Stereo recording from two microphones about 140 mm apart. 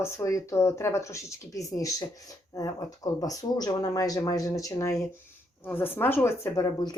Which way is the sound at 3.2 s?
25° left (ahead or behind).